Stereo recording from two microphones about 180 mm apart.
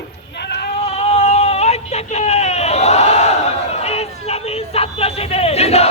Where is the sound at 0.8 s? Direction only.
35° left (ahead or behind).